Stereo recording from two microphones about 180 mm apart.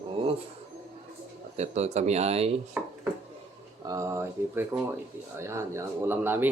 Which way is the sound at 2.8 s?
10° right (ahead or behind).